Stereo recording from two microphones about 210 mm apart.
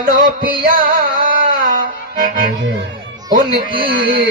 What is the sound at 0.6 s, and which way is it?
Music, 45° right (ahead or behind).